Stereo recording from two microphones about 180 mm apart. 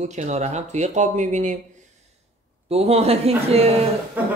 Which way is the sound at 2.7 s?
35° right (ahead or behind).